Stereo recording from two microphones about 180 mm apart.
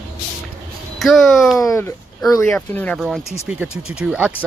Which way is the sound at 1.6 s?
15° left (ahead or behind).